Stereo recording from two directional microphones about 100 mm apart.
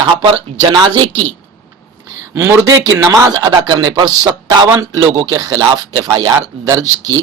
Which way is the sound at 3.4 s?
45° right (ahead or behind).